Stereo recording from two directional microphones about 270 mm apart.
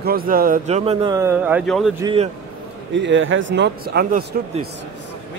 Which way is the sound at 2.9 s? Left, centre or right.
Right.